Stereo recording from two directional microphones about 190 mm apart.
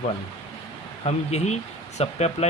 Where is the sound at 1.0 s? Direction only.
35° left (ahead or behind).